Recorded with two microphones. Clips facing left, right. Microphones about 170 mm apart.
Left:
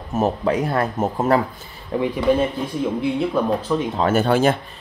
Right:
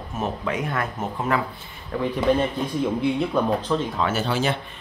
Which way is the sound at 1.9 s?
25° left (ahead or behind).